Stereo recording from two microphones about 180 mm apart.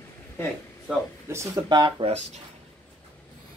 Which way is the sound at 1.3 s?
15° right (ahead or behind).